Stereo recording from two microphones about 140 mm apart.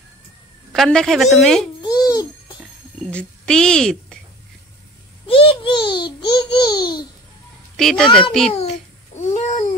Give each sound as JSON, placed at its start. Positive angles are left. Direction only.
{"t": 0.7, "sound": "a woman's voice", "side_deg": 5}
{"t": 1.9, "sound": "music", "side_deg": 25}
{"t": 3.1, "sound": "a woman's voice", "side_deg": 5}
{"t": 5.2, "sound": "a sound", "side_deg": 40}
{"t": 7.7, "sound": "a woman's voice", "side_deg": 5}
{"t": 8.5, "sound": "a child's voice", "side_deg": 50}
{"t": 9.2, "sound": "babbling", "side_deg": 60}